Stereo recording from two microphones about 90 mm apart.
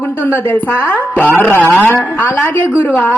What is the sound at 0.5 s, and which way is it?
A woman's voice, 15° left (ahead or behind).